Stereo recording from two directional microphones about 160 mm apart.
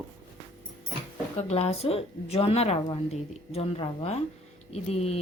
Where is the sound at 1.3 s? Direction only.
40° left (ahead or behind).